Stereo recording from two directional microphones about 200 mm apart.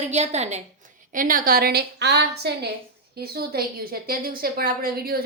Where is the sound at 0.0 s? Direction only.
35° right (ahead or behind).